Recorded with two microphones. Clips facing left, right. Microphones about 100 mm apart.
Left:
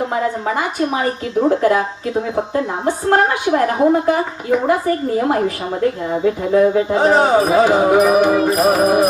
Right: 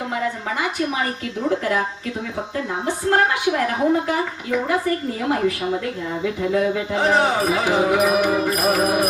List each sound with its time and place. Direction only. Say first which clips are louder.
0.4 s speech: left 5 dB; 35° left (ahead or behind)
2.8 s speech: left 3 dB; 35° left (ahead or behind)
8.4 s music: left 6 dB; 30° left (ahead or behind)